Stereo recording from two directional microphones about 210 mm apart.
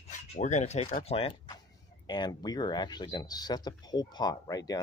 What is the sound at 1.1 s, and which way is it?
Speech, 25° left (ahead or behind).